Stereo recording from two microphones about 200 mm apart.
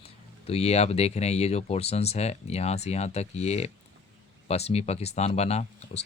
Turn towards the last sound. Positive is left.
turn(degrees=30)  # may be behind; listen again after turning